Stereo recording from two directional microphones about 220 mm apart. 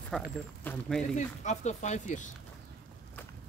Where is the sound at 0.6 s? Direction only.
5° left (ahead or behind).